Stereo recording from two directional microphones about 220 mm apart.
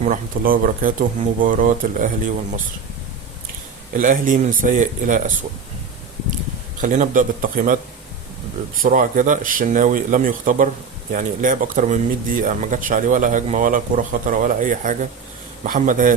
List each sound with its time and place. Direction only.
0.0 s speech: 40° right (ahead or behind)
3.9 s speech: 35° right (ahead or behind)
6.8 s speech: 35° right (ahead or behind)
8.8 s speech: 35° right (ahead or behind)